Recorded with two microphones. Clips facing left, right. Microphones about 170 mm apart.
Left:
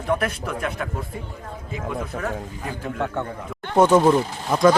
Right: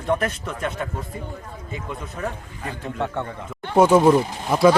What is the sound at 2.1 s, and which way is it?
Speech, 90° left.